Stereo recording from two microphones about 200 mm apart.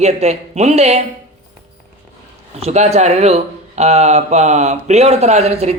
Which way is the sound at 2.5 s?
30° right (ahead or behind).